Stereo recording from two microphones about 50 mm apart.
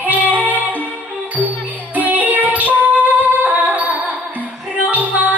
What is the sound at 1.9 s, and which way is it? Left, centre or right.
Music, right.